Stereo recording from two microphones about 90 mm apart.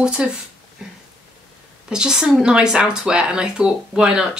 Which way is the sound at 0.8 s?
5° right (ahead or behind).